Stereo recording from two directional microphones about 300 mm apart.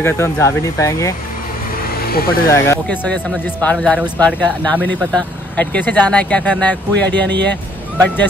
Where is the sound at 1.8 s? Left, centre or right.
Left.